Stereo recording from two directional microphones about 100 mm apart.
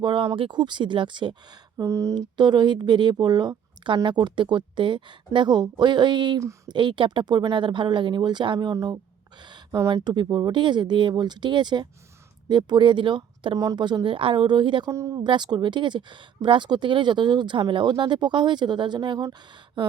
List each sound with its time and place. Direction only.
0.0 s speech: 50° right (ahead or behind)
1.8 s speech: 30° right (ahead or behind)
2.1 s speech: 45° right (ahead or behind)
8.5 s speech: 35° right (ahead or behind); by 14.8 s 55° right (ahead or behind)
14.8 s speech: 35° right (ahead or behind)
15.2 s speech: 45° right (ahead or behind)